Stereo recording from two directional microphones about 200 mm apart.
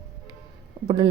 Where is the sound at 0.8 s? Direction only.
25° right (ahead or behind).